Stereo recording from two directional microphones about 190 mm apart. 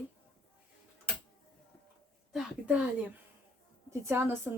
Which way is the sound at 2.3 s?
5° right (ahead or behind).